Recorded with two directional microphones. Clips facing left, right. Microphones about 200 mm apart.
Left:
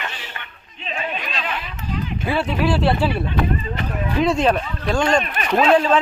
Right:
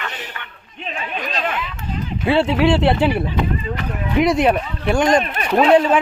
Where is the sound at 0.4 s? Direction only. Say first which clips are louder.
Right 2 dB; 25° left (ahead or behind).